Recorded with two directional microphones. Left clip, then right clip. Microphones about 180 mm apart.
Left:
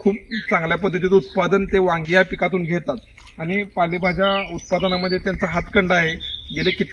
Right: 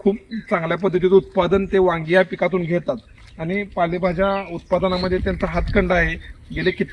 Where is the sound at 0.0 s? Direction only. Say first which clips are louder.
Even; 20° right (ahead or behind).